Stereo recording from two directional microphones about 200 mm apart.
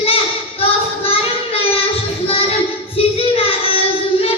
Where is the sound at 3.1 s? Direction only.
30° left (ahead or behind).